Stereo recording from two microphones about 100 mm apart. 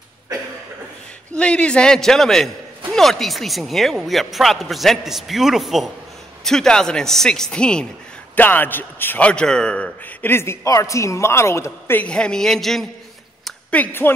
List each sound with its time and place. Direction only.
1.3 s a man's voice: 10° left (ahead or behind); by 12.0 s 25° left (ahead or behind)
12.0 s speech: 10° left (ahead or behind)
13.7 s a man's voice: 20° left (ahead or behind)